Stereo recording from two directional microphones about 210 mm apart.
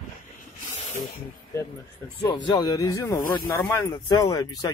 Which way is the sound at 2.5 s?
20° left (ahead or behind).